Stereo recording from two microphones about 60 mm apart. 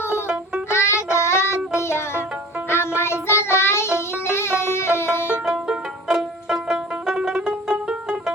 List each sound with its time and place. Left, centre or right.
0.7 s music: left
1.1 s child singing: left
1.8 s music: left
2.6 s child singing: left
5.5 s music: centre